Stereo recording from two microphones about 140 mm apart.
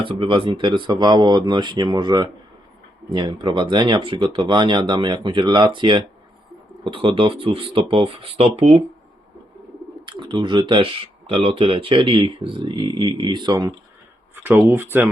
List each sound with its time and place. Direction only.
0.0 s speech: 40° right (ahead or behind)
10.1 s speech: 35° right (ahead or behind)
14.3 s a sound: 15° right (ahead or behind)
14.7 s speech: 15° right (ahead or behind)